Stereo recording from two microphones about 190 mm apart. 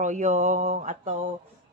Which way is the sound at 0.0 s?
40° right (ahead or behind).